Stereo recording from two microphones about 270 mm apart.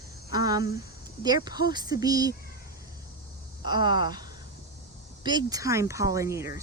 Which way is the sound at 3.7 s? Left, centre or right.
Centre.